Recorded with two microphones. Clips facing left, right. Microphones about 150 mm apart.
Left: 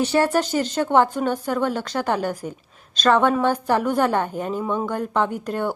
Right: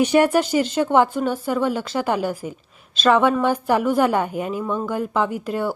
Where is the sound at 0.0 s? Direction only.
10° right (ahead or behind).